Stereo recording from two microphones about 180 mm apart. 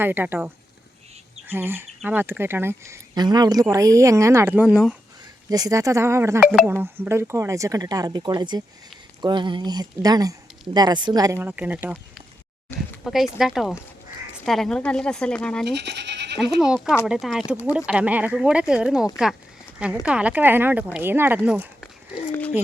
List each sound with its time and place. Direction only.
0.0 s speech: 10° right (ahead or behind)
1.5 s speech: 10° right (ahead or behind)
5.5 s speech: 20° right (ahead or behind)
6.4 s speech: 5° right (ahead or behind)
12.7 s a sound: 15° left (ahead or behind)
13.4 s speech: centre (ahead or behind)
15.6 s speech: 70° right (ahead or behind)
16.4 s speech: centre (ahead or behind)
22.3 s speech: 10° left (ahead or behind)